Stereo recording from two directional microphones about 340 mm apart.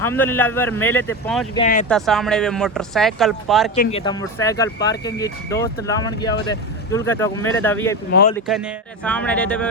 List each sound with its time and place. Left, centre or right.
0.0 s speech: centre
1.5 s speech: centre
1.9 s speech: centre
3.8 s speech: centre